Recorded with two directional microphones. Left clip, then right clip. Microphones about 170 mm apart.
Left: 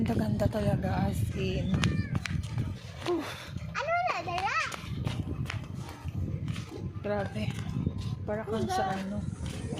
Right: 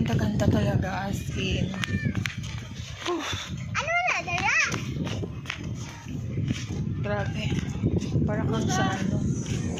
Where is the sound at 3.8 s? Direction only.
25° left (ahead or behind).